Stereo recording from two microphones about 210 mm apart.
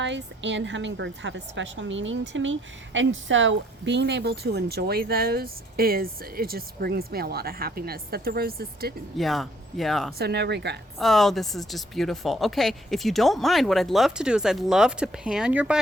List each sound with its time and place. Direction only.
0.0 s a woman's voice: 60° right (ahead or behind)
9.1 s speech: centre (ahead or behind)
10.2 s a woman's voice: 50° right (ahead or behind)
11.0 s speech: centre (ahead or behind)